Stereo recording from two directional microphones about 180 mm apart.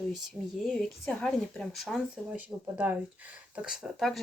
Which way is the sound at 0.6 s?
Centre (ahead or behind).